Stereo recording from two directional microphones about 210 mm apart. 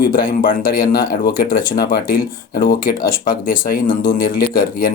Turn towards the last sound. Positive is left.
turn(degrees=40)  # may be behind; listen again after turning